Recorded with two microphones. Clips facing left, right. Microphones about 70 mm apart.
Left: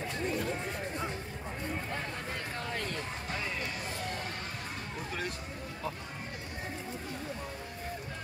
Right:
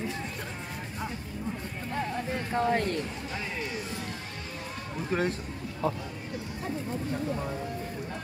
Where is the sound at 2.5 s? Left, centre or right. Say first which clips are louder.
Right 14 dB; right.